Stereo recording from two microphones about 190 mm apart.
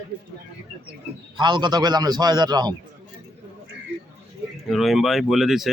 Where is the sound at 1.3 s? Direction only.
25° right (ahead or behind).